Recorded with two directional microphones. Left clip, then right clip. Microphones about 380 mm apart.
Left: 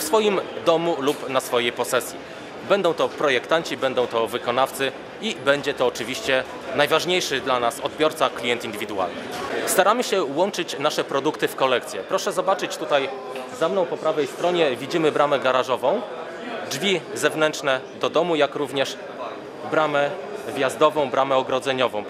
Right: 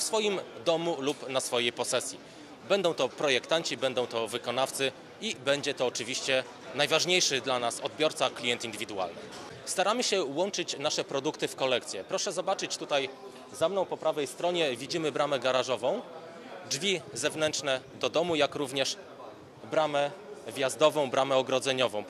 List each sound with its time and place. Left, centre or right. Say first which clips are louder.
0.1 s speech: left 12 dB; right